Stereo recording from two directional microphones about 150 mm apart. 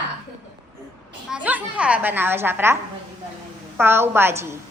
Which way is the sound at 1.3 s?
10° right (ahead or behind).